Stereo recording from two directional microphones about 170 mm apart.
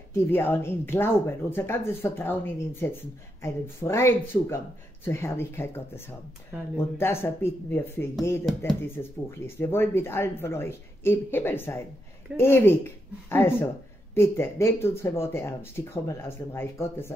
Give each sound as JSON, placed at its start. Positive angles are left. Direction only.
{"t": 0.1, "sound": "speech", "side_deg": 15}